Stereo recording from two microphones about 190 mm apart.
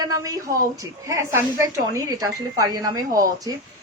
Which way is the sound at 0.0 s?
20° right (ahead or behind).